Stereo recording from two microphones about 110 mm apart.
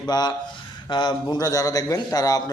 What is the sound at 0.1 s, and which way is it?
A man's voice, 40° left (ahead or behind).